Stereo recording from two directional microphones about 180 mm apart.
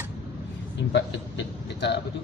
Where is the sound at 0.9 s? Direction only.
75° left (ahead or behind).